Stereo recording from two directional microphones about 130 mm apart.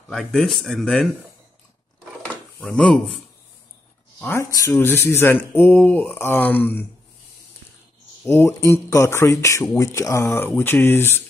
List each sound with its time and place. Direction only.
0.1 s speech: centre (ahead or behind)
2.6 s mantra: 10° left (ahead or behind)
4.2 s speech: 15° left (ahead or behind)
4.5 s speech: 25° left (ahead or behind)
4.7 s mantra: 20° left (ahead or behind)
8.3 s speech: 20° left (ahead or behind)
10.6 s mantra: 15° left (ahead or behind)